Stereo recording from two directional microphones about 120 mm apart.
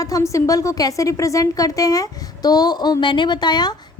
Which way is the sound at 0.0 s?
25° left (ahead or behind).